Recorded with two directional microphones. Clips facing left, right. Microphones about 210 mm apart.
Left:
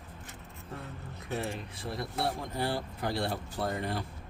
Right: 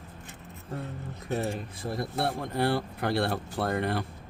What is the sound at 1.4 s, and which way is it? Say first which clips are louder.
Speech: right 4 dB; 50° right (ahead or behind).